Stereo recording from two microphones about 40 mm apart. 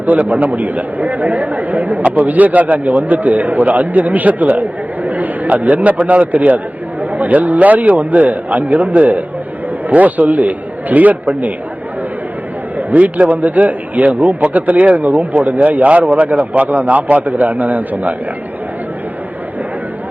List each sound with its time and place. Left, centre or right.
0.0 s a man's voice: right
12.7 s a man's voice: right